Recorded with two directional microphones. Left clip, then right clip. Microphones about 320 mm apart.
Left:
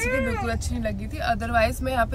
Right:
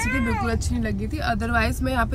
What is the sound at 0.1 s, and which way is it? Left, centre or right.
Speech, centre.